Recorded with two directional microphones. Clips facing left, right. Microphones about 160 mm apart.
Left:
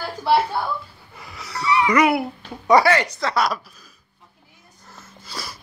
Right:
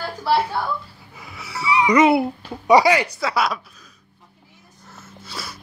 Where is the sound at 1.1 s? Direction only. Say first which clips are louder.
Even; 5° right (ahead or behind); by 2.6 s 25° right (ahead or behind).